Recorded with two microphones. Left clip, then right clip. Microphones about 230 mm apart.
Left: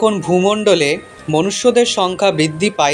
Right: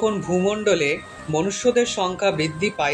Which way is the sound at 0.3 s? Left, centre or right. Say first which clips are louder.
Left 7 dB; left.